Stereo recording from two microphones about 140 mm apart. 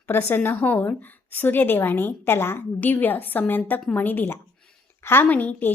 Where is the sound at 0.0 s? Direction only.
15° left (ahead or behind).